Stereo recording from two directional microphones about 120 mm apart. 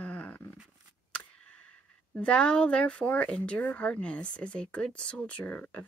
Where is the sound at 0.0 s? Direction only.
10° left (ahead or behind).